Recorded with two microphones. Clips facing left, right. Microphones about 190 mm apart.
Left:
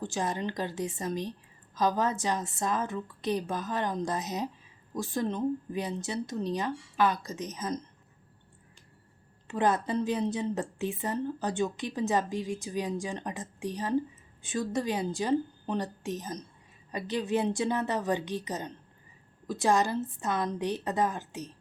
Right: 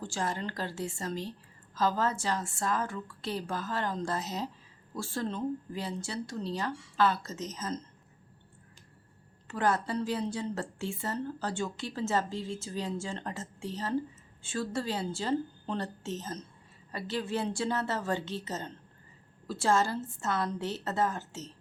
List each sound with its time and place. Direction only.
0.0 s a woman's voice: 20° left (ahead or behind)
9.5 s a woman's voice: 20° left (ahead or behind)